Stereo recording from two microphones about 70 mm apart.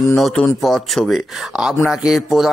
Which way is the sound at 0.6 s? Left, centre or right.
Centre.